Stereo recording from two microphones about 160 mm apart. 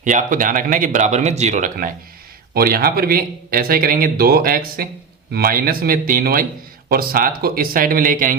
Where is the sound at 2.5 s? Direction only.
70° right (ahead or behind).